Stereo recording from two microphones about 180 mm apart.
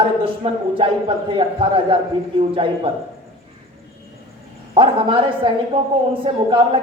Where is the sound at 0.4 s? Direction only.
30° right (ahead or behind).